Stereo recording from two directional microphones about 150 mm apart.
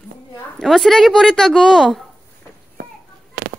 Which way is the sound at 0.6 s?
Centre (ahead or behind).